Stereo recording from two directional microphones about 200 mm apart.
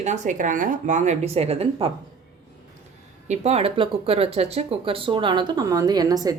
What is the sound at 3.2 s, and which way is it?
Speech, 35° right (ahead or behind).